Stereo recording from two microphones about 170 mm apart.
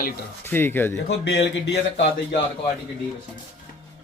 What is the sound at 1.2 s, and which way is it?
Speech, 90° left.